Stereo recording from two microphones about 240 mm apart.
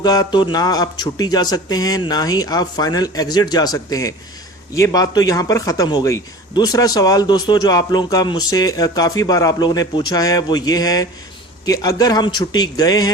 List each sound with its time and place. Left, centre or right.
0.0 s speech: centre